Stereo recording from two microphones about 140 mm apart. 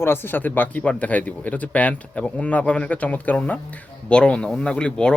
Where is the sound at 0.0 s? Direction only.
15° left (ahead or behind).